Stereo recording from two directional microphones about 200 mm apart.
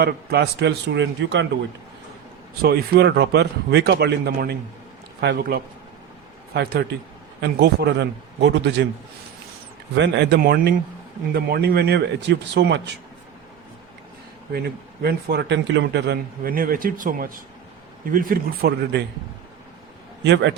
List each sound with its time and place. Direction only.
0.0 s a man's voice: 55° right (ahead or behind)
2.6 s a man's voice: 50° right (ahead or behind)
10.0 s a man's voice: 60° right (ahead or behind)
14.5 s a man's voice: 50° right (ahead or behind)
20.2 s a man's voice: 60° right (ahead or behind)